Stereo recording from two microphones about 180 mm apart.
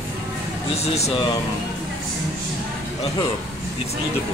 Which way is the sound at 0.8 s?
35° left (ahead or behind).